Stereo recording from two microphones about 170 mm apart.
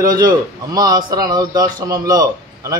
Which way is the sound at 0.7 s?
20° right (ahead or behind).